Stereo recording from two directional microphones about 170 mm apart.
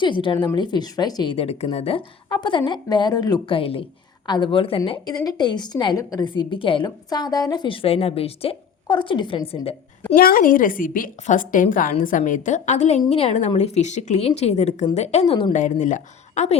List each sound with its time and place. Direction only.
0.0 s a woman's voice: 30° left (ahead or behind)
9.6 s a sound: 35° left (ahead or behind)
10.2 s a woman's voice: 60° left (ahead or behind); by 15.5 s 30° left (ahead or behind)
15.5 s a woman's voice: 50° left (ahead or behind)